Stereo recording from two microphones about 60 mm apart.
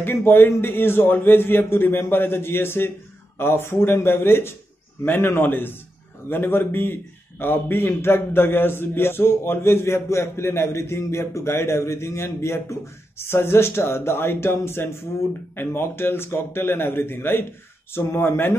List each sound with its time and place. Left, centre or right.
0.0 s a man's voice: left